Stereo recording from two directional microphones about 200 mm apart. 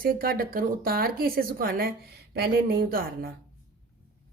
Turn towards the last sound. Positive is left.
turn(degrees=-45)  # may be behind; listen again after turning